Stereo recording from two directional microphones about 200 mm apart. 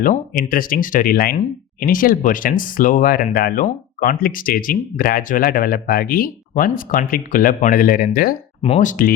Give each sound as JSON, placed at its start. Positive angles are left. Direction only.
{"t": 0.0, "sound": "speech", "side_deg": 45}
{"t": 8.6, "sound": "speech", "side_deg": 35}